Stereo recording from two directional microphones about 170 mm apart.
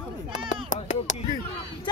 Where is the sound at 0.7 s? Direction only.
45° left (ahead or behind).